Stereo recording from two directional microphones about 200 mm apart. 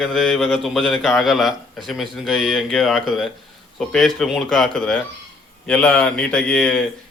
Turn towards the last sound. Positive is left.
turn(degrees=5)  # may be behind; listen again after turning